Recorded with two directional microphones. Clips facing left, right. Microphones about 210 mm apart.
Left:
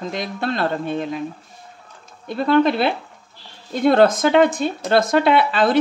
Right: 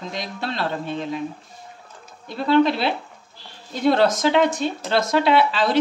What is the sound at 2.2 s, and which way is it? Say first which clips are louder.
Speech: left 1 dB; 50° left (ahead or behind).